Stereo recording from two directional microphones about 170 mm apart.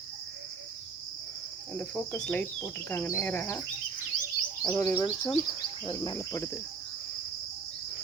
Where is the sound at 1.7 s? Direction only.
10° left (ahead or behind).